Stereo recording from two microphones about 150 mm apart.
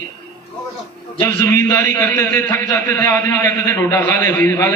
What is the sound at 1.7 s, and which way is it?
A man's voice, 10° left (ahead or behind).